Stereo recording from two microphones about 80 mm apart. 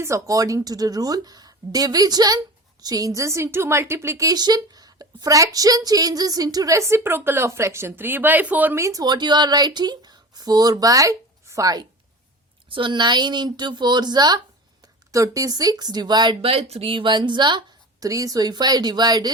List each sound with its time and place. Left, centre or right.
0.0 s a woman's voice: right
4.3 s a woman's voice: right; by 8.7 s centre
8.7 s speech: right
12.6 s a woman's voice: right
15.1 s a woman's voice: right
16.9 s a woman's voice: right
18.0 s speech: right